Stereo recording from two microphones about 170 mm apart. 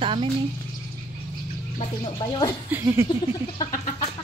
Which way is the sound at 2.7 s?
15° right (ahead or behind).